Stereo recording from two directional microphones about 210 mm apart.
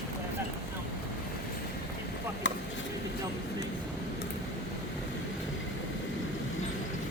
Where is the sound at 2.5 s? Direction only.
60° left (ahead or behind).